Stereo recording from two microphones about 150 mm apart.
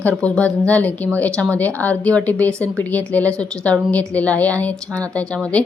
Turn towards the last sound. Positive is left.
turn(degrees=5)  # may be behind; listen again after turning